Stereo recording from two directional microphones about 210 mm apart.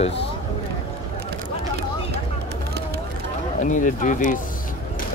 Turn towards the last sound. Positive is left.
turn(degrees=35)  # may be behind; listen again after turning